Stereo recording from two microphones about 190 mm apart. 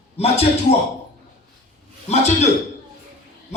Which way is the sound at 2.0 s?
35° left (ahead or behind).